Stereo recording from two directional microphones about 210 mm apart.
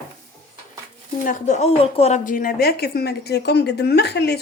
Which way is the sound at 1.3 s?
35° left (ahead or behind).